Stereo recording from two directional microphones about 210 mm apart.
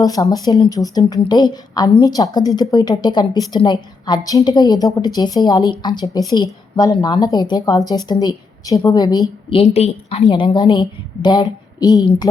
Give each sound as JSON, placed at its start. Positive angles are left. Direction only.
{"t": 0.0, "sound": "a woman's voice", "side_deg": 15}
{"t": 9.5, "sound": "a woman's voice", "side_deg": 30}